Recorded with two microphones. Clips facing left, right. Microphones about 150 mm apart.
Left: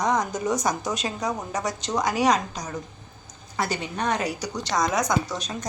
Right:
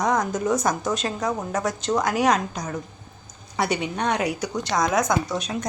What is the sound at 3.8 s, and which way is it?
A woman's voice, 10° right (ahead or behind).